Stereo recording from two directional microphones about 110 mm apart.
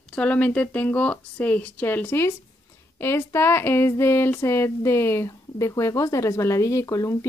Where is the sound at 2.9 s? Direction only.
20° left (ahead or behind).